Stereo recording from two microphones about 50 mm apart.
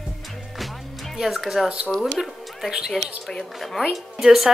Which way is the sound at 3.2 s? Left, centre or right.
Centre.